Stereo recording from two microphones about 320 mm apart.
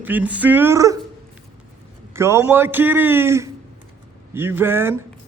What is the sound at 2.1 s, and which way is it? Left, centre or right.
Speech, centre.